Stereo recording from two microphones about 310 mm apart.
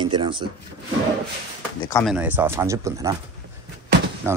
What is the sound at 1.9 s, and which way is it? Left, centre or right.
Speech, centre.